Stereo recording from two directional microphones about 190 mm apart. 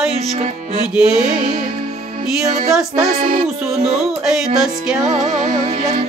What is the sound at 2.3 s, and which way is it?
Music, 5° right (ahead or behind).